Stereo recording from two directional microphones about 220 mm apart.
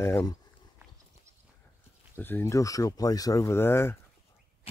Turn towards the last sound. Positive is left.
turn(degrees=10)  # may be behind; listen again after turning